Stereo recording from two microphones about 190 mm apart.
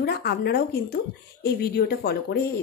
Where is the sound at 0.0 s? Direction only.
55° left (ahead or behind).